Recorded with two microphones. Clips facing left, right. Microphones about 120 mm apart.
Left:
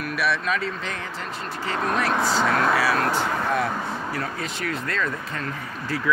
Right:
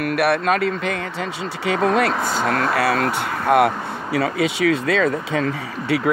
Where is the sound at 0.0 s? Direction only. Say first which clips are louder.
Right 7 dB; 60° right (ahead or behind); by 5.4 s 90° right.